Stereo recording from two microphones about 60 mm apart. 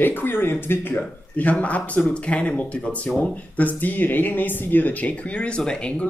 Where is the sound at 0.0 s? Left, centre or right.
Left.